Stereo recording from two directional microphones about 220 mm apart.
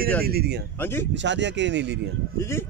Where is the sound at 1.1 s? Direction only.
55° right (ahead or behind).